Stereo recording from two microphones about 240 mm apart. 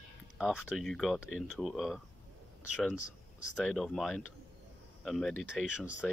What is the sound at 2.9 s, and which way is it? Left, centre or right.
Speech, right.